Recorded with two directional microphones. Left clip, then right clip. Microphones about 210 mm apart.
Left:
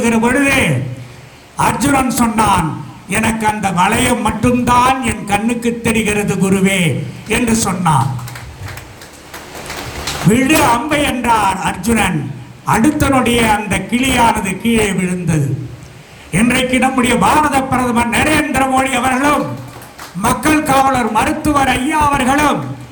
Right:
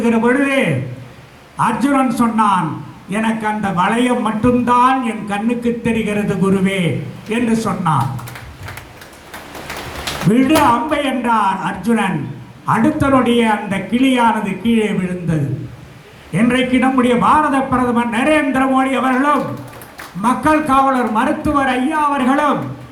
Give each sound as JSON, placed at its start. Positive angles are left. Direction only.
{"t": 0.0, "sound": "a man's voice", "side_deg": 55}
{"t": 10.3, "sound": "a man's voice", "side_deg": 55}
{"t": 20.4, "sound": "a man's voice", "side_deg": 55}